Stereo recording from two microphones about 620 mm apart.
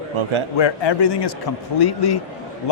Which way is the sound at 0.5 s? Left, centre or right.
Left.